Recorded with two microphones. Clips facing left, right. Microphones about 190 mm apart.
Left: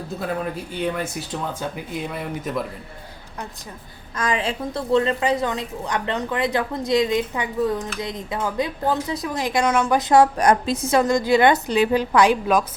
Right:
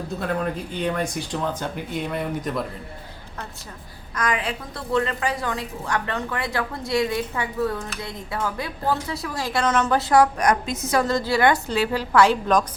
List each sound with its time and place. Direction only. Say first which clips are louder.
0.2 s speech: even; 5° left (ahead or behind)
4.1 s a woman's voice: left 2 dB; 25° left (ahead or behind); by 12.6 s 10° left (ahead or behind)